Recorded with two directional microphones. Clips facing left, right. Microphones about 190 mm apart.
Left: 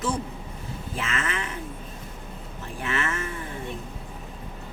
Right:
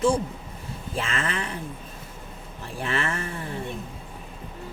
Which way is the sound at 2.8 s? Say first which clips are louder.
Right 1 dB; 35° right (ahead or behind).